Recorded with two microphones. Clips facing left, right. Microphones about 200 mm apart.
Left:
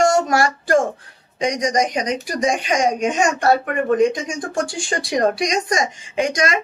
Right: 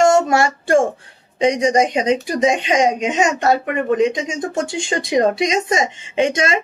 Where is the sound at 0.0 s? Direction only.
25° right (ahead or behind).